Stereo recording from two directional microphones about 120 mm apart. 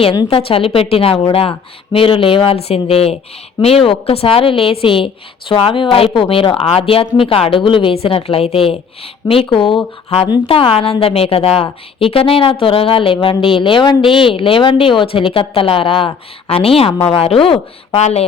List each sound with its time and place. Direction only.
0.0 s a woman's voice: 45° left (ahead or behind); by 18.3 s 60° left (ahead or behind)